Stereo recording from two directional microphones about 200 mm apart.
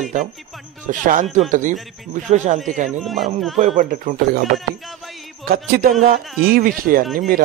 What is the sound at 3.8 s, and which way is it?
Speech, 40° right (ahead or behind).